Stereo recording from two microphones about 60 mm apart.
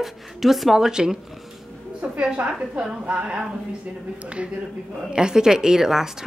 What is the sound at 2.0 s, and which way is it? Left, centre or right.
A woman's voice, right.